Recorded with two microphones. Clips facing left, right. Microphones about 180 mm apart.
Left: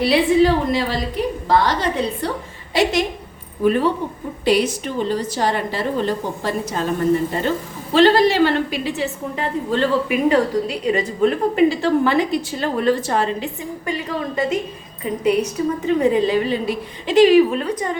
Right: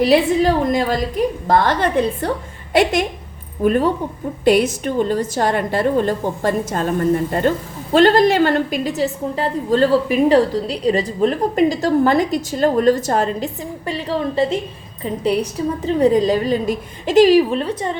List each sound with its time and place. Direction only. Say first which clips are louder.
0.0 s a woman's voice: right 1 dB; 45° right (ahead or behind)
7.9 s a woman's voice: right 1 dB; 50° right (ahead or behind); by 17.9 s 30° right (ahead or behind)